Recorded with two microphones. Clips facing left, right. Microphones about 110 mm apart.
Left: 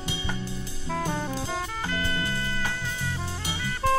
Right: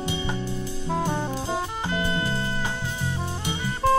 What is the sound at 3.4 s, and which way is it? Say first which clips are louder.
Music: right 3 dB; 20° right (ahead or behind).